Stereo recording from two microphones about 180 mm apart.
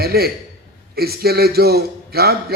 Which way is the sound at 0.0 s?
60° right (ahead or behind).